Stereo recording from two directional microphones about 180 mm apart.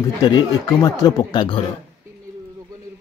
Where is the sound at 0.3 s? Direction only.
20° left (ahead or behind).